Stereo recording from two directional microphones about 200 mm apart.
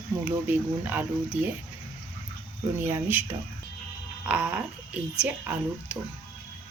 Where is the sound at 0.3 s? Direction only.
10° right (ahead or behind).